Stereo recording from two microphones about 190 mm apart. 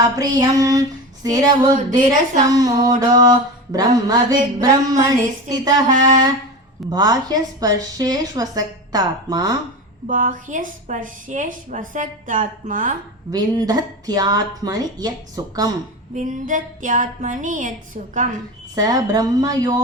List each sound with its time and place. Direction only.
0.3 s music: 20° right (ahead or behind)
6.9 s music: 20° right (ahead or behind)
10.1 s a woman's voice: 40° right (ahead or behind)
13.3 s music: 20° right (ahead or behind)
16.1 s a woman's voice: 40° right (ahead or behind)
18.7 s music: 20° right (ahead or behind)